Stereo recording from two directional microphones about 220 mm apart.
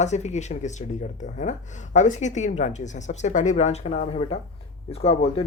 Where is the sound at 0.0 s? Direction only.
30° left (ahead or behind).